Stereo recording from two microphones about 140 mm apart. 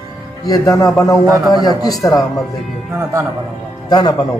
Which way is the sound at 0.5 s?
25° left (ahead or behind).